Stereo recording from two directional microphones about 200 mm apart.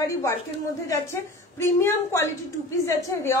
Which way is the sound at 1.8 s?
15° left (ahead or behind).